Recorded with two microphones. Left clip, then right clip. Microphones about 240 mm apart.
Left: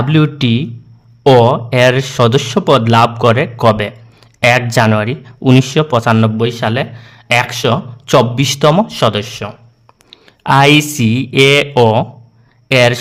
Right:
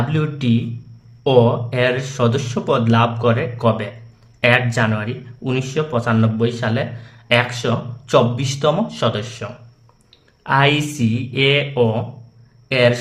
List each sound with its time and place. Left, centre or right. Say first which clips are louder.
0.1 s speech: left 8 dB; left